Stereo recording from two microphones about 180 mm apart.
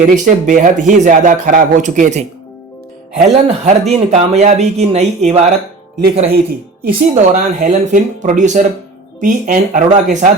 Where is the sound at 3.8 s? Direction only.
35° right (ahead or behind).